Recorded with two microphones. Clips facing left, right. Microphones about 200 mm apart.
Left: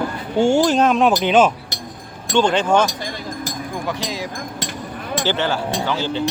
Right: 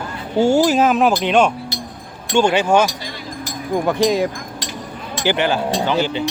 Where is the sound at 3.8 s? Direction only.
55° right (ahead or behind).